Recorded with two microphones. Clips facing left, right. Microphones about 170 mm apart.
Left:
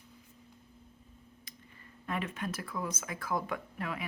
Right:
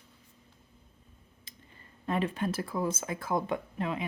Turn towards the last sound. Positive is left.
turn(degrees=-25)  # may be behind; listen again after turning